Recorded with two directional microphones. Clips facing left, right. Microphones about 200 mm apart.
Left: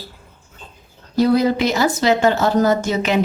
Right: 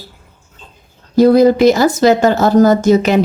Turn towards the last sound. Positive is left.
turn(degrees=-40)  # may be behind; listen again after turning